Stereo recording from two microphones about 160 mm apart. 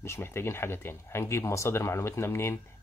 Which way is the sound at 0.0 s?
15° left (ahead or behind).